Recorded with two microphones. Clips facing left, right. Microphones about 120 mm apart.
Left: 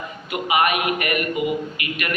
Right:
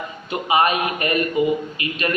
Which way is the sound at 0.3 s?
30° right (ahead or behind).